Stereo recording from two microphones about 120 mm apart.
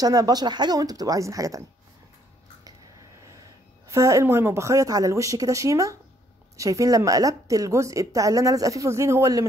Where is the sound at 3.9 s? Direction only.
25° right (ahead or behind).